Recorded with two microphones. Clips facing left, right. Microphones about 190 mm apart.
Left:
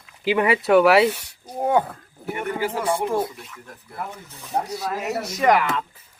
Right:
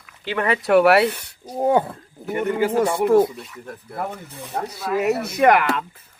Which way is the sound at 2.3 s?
60° right (ahead or behind).